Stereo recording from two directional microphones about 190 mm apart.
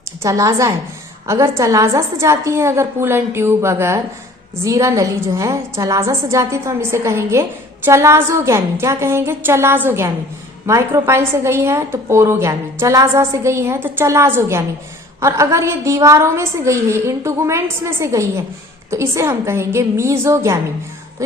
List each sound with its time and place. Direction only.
0.2 s a woman's voice: 15° right (ahead or behind)